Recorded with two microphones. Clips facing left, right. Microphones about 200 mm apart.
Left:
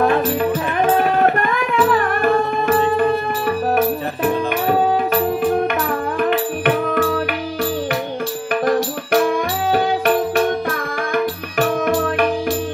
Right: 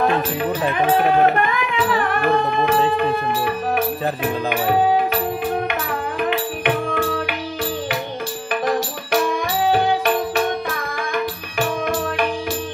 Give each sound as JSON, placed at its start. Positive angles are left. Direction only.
{"t": 6.3, "sound": "music", "side_deg": 45}
{"t": 8.6, "sound": "music", "side_deg": 50}
{"t": 11.5, "sound": "music", "side_deg": 45}